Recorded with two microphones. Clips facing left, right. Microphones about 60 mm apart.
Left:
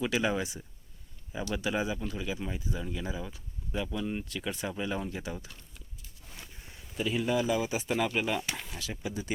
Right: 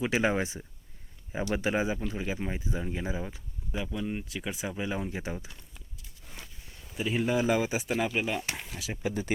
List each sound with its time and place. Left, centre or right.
0.0 s speech: right
3.9 s speech: centre
4.9 s speech: centre
7.1 s speech: right
7.4 s speech: right
7.8 s speech: centre
8.9 s speech: right